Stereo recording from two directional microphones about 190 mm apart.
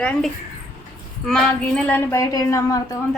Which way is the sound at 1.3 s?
5° left (ahead or behind).